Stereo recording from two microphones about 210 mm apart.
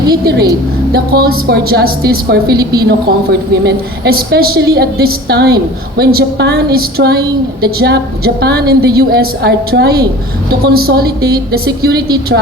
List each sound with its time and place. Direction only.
0.9 s a woman's voice: 50° right (ahead or behind)